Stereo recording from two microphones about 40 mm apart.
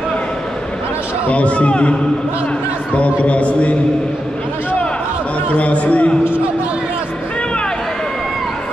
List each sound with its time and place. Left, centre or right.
1.3 s a man's voice: left
3.0 s a man's voice: left
5.6 s a man's voice: left